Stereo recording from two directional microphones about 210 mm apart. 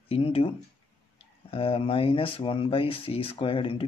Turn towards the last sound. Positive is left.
turn(degrees=25)  # may be behind; listen again after turning